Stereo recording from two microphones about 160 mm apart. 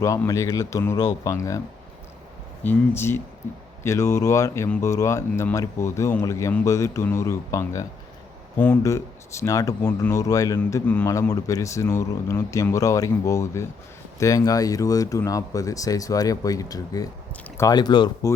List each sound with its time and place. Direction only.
0.0 s a man's voice: 20° left (ahead or behind)
2.6 s a man's voice: 15° left (ahead or behind)